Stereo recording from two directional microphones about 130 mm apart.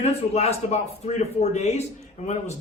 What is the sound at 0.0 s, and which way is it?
Speech, 55° left (ahead or behind).